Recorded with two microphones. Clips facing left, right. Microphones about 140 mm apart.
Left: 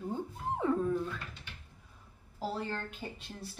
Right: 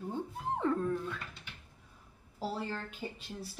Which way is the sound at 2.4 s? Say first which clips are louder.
Left 1 dB; 5° right (ahead or behind).